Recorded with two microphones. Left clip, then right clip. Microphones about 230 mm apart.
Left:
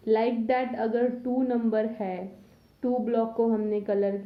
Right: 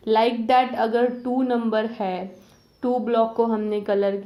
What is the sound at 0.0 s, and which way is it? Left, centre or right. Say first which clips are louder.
A woman's voice: right 5 dB; centre.